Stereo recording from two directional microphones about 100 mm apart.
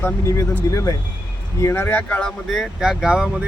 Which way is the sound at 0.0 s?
30° left (ahead or behind).